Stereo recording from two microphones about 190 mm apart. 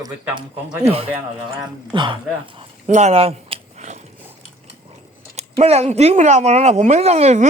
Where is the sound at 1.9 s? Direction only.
25° right (ahead or behind).